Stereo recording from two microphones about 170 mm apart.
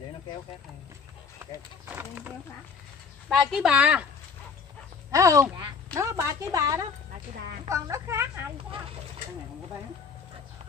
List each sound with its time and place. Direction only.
3.3 s speech: 5° right (ahead or behind)
5.1 s a woman's voice: 20° right (ahead or behind)